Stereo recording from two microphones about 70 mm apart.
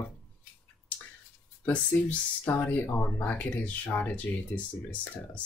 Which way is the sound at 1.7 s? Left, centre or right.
Left.